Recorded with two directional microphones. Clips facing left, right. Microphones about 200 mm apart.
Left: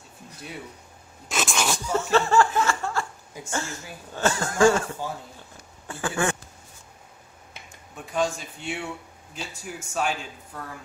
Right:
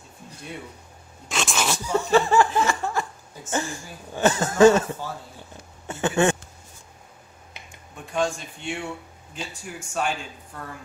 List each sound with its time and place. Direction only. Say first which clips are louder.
1.3 s sneeze: even; centre (ahead or behind)
2.0 s a woman's voice: right 2 dB; 15° right (ahead or behind)
5.9 s a sound: right 5 dB; 25° right (ahead or behind)
8.1 s a man's voice: right 1 dB; 5° left (ahead or behind)